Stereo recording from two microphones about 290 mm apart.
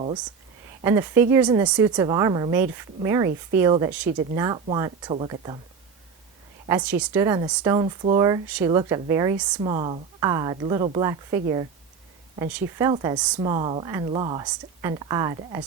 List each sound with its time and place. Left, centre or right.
0.9 s speech: centre
6.7 s speech: centre
12.5 s speech: centre